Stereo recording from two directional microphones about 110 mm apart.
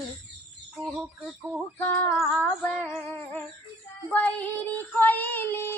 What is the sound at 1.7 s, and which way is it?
Female singing, 20° left (ahead or behind).